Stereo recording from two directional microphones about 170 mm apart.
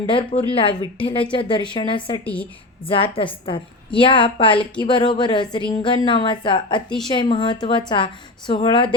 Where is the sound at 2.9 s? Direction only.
30° left (ahead or behind).